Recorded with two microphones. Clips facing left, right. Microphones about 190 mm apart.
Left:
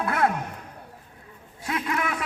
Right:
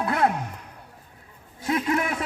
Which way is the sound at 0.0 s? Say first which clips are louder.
Right 1 dB; 20° right (ahead or behind).